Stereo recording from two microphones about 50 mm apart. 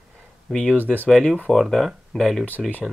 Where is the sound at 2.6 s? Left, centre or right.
Left.